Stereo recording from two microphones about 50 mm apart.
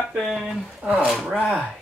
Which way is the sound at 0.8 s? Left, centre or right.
Right.